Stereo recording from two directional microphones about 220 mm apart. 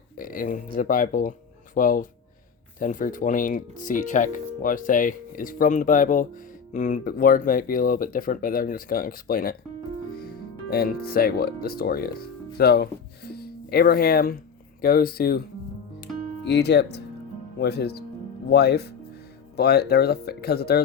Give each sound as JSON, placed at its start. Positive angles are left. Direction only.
{"t": 0.2, "sound": "speech", "side_deg": 40}
{"t": 16.5, "sound": "speech", "side_deg": 50}